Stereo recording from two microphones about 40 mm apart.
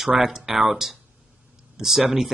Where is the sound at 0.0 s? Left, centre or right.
Centre.